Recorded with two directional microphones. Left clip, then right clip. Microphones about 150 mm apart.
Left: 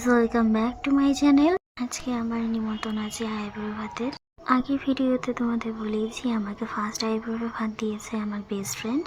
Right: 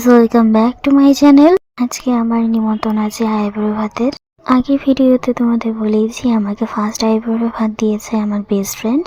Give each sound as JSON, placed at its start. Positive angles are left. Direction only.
{"t": 0.0, "sound": "speech", "side_deg": -40}